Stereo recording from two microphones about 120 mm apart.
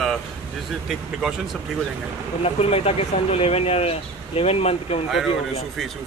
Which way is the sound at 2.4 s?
55° left (ahead or behind).